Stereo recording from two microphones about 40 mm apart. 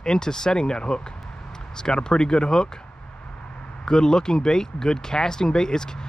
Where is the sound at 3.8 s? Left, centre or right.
Centre.